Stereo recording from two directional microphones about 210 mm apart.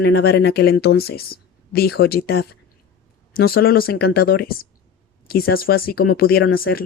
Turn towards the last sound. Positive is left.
turn(degrees=45)  # may be behind; listen again after turning